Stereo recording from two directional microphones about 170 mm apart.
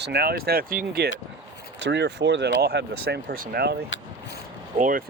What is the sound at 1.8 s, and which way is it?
Speech, 90° right.